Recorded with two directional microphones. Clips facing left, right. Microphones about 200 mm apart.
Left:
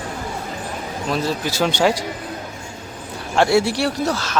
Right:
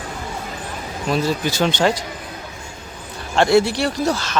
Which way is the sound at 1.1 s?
Centre (ahead or behind).